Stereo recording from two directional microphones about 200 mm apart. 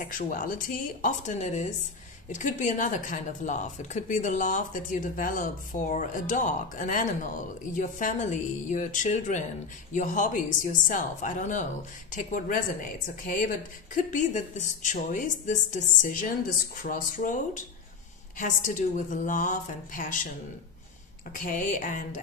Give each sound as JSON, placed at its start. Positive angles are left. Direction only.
{"t": 0.0, "sound": "speech", "side_deg": 45}
{"t": 21.5, "sound": "speech", "side_deg": 40}